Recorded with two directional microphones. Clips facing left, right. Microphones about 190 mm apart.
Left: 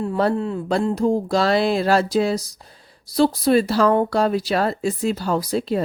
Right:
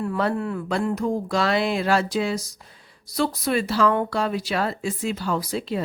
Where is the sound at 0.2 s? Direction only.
30° left (ahead or behind).